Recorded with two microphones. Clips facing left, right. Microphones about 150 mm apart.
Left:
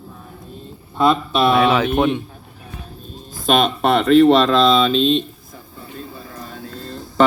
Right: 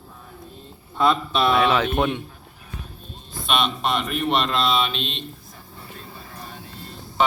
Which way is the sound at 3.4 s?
40° left (ahead or behind).